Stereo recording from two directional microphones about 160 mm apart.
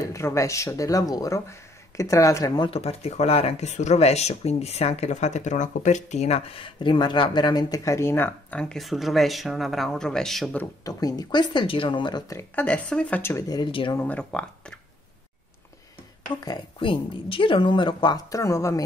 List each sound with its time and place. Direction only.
0.0 s speech: 20° left (ahead or behind)
2.7 s speech: 40° left (ahead or behind); by 10.6 s centre (ahead or behind)
10.9 s speech: 25° left (ahead or behind)
12.5 s a woman's voice: 10° left (ahead or behind); by 13.9 s 30° left (ahead or behind)
13.9 s a woman's voice: 10° left (ahead or behind)
16.4 s speech: 30° left (ahead or behind)